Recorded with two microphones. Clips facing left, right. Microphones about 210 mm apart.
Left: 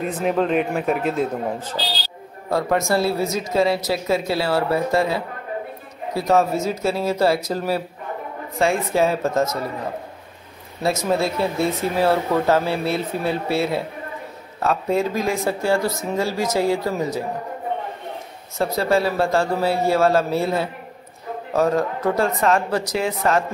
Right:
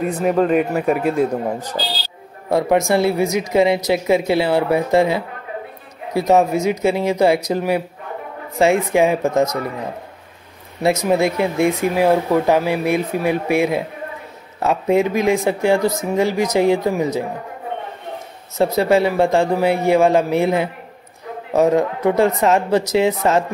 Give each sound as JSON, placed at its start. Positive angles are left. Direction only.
{"t": 0.0, "sound": "speech", "side_deg": -5}
{"t": 6.2, "sound": "speech", "side_deg": -15}
{"t": 10.8, "sound": "speech", "side_deg": -15}
{"t": 18.6, "sound": "speech", "side_deg": -20}